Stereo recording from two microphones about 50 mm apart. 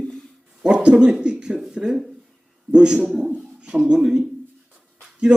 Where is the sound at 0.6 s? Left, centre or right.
Right.